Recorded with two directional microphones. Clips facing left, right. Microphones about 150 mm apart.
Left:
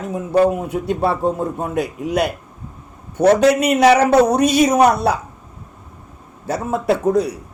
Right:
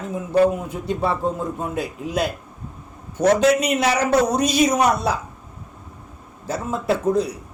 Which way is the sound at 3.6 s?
65° left (ahead or behind).